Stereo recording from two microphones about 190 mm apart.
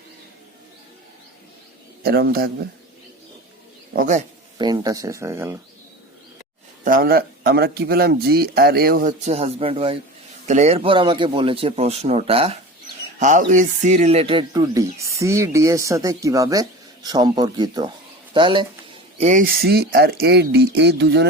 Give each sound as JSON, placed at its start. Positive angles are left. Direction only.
{"t": 2.0, "sound": "speech", "side_deg": -55}
{"t": 3.9, "sound": "speech", "side_deg": -40}
{"t": 4.5, "sound": "speech", "side_deg": -20}
{"t": 6.8, "sound": "speech", "side_deg": -50}
{"t": 13.1, "sound": "speech", "side_deg": -40}
{"t": 19.1, "sound": "speech", "side_deg": -40}